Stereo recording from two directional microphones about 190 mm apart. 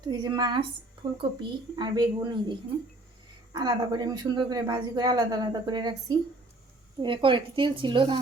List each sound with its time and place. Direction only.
0.1 s speech: 20° right (ahead or behind)